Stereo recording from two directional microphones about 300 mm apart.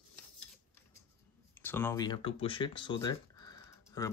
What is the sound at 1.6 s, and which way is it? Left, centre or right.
Speech, centre.